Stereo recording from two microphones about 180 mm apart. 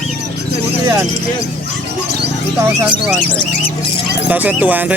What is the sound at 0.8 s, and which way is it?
Speech, 15° right (ahead or behind).